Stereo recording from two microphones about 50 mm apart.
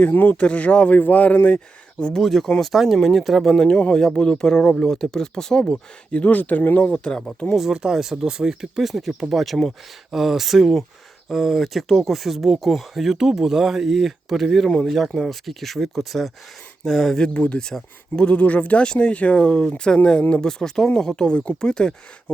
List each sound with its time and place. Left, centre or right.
0.0 s speech: left
0.3 s speech: left
2.0 s speech: centre
2.2 s speech: centre
3.5 s speech: centre; by 6.8 s left
6.8 s speech: centre
7.5 s speech: centre
17.3 s speech: left